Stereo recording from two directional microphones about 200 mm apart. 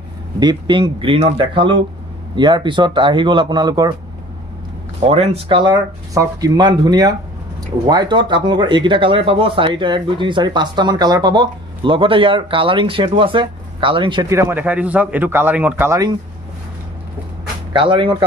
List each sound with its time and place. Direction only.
0.4 s speech: 20° right (ahead or behind)
5.0 s speech: 30° right (ahead or behind); by 16.1 s 15° right (ahead or behind)
17.7 s speech: 25° right (ahead or behind)